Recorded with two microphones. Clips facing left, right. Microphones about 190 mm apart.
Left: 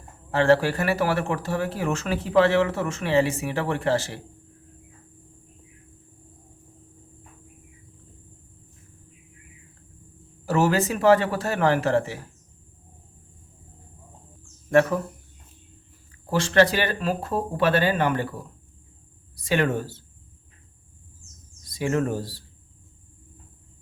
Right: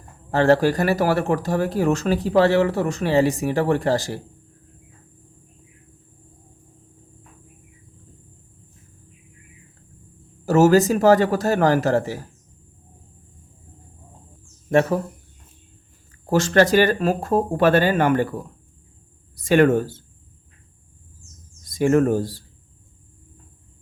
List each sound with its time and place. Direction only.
0.3 s speech: 40° right (ahead or behind)
10.4 s speech: 40° right (ahead or behind)
14.7 s speech: 25° right (ahead or behind)
16.3 s speech: 45° right (ahead or behind)
19.4 s speech: 50° right (ahead or behind)
21.7 s speech: 50° right (ahead or behind)